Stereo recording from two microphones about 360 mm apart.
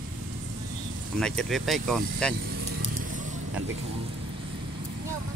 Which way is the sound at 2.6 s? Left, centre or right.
Right.